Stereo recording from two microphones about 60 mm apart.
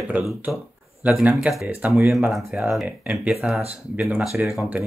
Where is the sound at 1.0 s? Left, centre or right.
Right.